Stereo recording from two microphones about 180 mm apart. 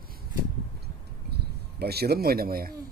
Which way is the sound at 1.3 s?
60° right (ahead or behind).